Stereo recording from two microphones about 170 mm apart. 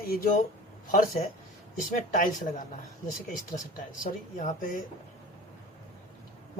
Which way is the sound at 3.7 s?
50° left (ahead or behind).